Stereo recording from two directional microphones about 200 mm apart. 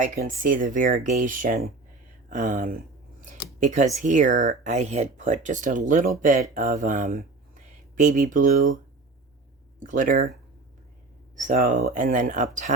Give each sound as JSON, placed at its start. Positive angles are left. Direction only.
{"t": 0.0, "sound": "speech", "side_deg": -45}
{"t": 9.8, "sound": "speech", "side_deg": -40}
{"t": 11.3, "sound": "speech", "side_deg": -40}